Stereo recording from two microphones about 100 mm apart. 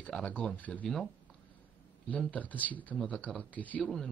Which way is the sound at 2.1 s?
15° left (ahead or behind).